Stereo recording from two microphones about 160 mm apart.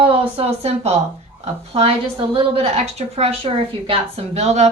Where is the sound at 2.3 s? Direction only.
35° right (ahead or behind).